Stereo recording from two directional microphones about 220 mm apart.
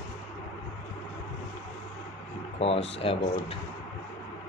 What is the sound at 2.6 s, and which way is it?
Speech, 25° left (ahead or behind).